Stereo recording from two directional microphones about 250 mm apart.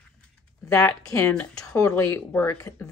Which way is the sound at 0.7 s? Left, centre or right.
Centre.